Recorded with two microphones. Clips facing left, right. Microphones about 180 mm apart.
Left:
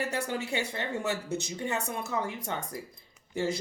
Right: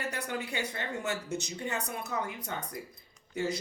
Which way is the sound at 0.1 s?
25° left (ahead or behind).